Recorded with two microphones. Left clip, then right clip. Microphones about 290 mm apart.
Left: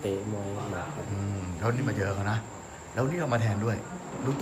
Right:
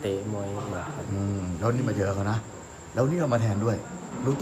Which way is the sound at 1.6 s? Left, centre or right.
Centre.